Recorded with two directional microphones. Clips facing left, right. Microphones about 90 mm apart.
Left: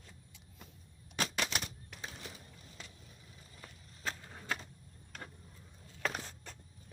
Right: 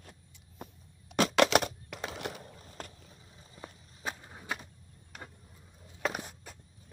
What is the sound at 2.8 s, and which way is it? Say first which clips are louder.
Vehicle: right 9 dB; 45° right (ahead or behind).